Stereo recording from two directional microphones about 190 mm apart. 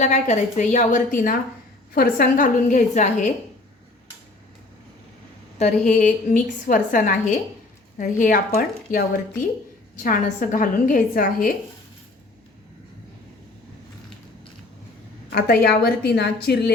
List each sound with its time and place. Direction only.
0.0 s a woman's voice: 40° left (ahead or behind)
5.5 s a woman's voice: 40° left (ahead or behind)
15.3 s a woman's voice: 55° left (ahead or behind)